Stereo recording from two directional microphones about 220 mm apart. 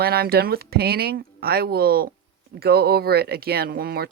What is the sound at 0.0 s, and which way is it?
Speech, 45° right (ahead or behind).